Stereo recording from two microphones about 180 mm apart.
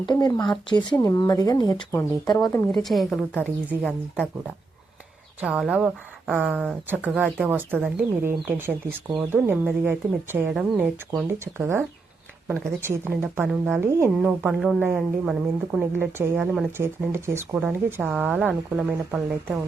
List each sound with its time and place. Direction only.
0.0 s speech: 25° left (ahead or behind)
2.7 s a woman's voice: centre (ahead or behind)
5.4 s a woman's voice: 5° right (ahead or behind)
16.7 s speech: 15° right (ahead or behind)